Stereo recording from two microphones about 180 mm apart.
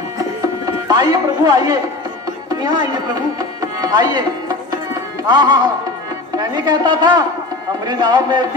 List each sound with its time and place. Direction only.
0.7 s a man's voice: 25° right (ahead or behind)